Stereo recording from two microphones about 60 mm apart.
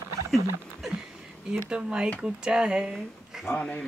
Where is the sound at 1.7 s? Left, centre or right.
Centre.